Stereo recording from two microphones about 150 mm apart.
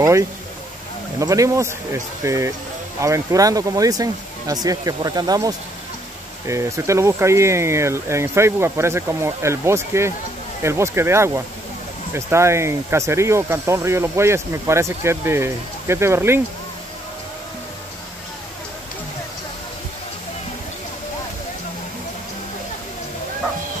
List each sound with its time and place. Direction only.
1.2 s speech: 20° right (ahead or behind)